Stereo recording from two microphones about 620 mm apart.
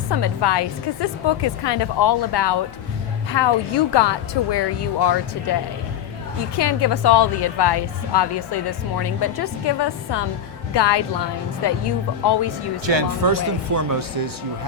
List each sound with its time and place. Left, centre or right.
0.1 s a woman's voice: left
6.6 s a woman's voice: left
12.8 s speech: right